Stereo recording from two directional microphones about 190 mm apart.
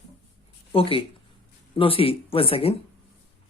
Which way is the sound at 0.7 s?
30° left (ahead or behind).